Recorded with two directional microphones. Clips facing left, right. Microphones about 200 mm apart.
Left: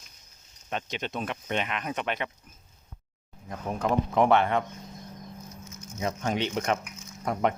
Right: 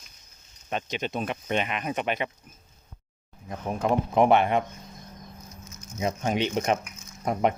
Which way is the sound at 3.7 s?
15° right (ahead or behind).